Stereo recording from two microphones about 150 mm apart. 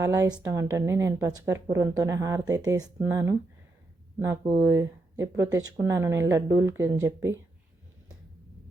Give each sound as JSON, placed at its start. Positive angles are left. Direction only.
{"t": 0.0, "sound": "speech", "side_deg": -20}